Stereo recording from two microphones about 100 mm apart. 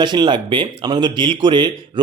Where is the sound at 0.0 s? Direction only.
50° right (ahead or behind).